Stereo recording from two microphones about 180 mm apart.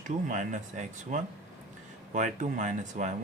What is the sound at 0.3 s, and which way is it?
Speech, 45° right (ahead or behind).